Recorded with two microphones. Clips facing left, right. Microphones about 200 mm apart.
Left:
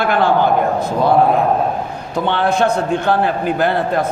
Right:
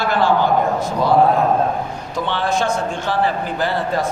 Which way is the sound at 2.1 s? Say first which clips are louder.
Left 4 dB; 60° left (ahead or behind).